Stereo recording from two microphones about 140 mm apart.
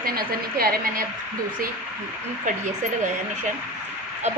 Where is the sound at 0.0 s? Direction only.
90° right.